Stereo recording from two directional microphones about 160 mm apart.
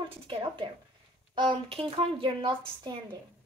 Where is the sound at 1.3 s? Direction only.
35° right (ahead or behind).